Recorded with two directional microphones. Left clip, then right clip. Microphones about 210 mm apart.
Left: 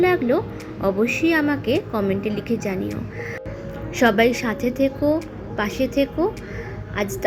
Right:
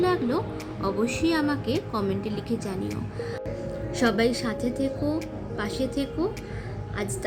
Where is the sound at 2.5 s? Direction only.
30° left (ahead or behind).